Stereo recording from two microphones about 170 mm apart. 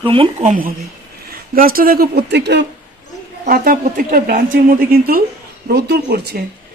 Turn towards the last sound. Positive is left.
turn(degrees=-70)  # may be behind; listen again after turning